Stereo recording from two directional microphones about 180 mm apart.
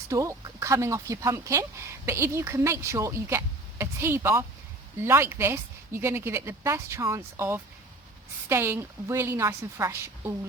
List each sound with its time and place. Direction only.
0.1 s speech: 15° right (ahead or behind)